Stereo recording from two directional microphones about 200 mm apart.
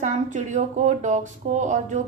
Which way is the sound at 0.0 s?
40° right (ahead or behind).